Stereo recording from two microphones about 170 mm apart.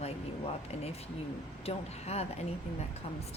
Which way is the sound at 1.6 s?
40° left (ahead or behind).